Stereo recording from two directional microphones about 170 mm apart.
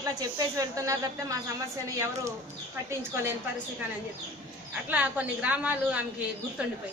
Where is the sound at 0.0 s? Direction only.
20° right (ahead or behind).